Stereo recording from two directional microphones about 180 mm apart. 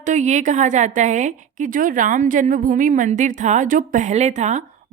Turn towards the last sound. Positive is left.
turn(degrees=-40)  # may be behind; listen again after turning